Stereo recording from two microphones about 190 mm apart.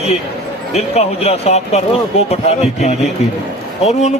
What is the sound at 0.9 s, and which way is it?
A man's voice, 35° left (ahead or behind).